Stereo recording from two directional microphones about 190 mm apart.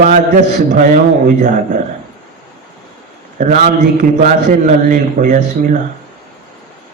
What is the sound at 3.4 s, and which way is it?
A man's voice, 40° right (ahead or behind).